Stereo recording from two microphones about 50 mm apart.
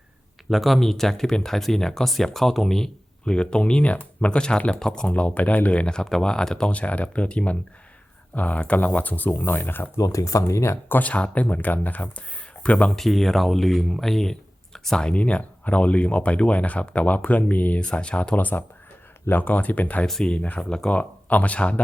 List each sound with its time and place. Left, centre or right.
0.5 s speech: centre
5.1 s speech: left
5.8 s speech: centre
6.7 s speech: left
10.1 s speech: left
10.8 s speech: left
11.1 s speech: left
13.0 s speech: centre; by 17.7 s left
17.7 s speech: left
18.3 s speech: left
20.2 s speech: centre
20.9 s speech: left